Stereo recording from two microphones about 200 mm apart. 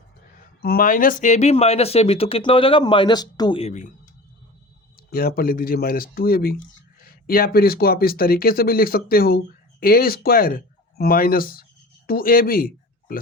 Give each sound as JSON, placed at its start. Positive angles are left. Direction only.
{"t": 0.6, "sound": "speech", "side_deg": 50}
{"t": 5.1, "sound": "speech", "side_deg": 50}